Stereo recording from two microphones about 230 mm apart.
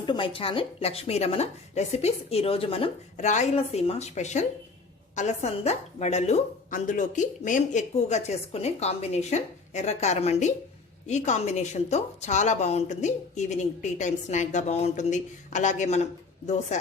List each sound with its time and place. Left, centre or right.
0.0 s a woman's voice: left